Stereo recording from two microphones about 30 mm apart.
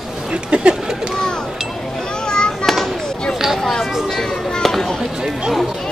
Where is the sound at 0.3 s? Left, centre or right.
Right.